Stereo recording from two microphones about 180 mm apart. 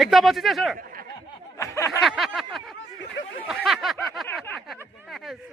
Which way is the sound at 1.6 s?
15° left (ahead or behind).